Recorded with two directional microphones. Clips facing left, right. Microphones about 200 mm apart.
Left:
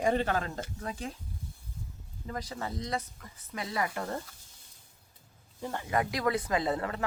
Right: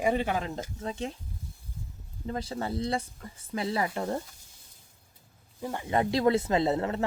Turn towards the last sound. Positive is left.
turn(degrees=-25)  # may be behind; listen again after turning